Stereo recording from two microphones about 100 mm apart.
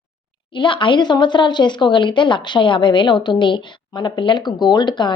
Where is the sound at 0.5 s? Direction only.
55° left (ahead or behind).